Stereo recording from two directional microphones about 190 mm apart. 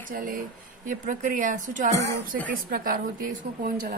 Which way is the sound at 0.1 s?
45° right (ahead or behind).